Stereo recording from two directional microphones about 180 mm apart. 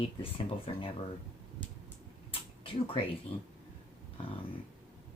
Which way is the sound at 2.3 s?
30° left (ahead or behind).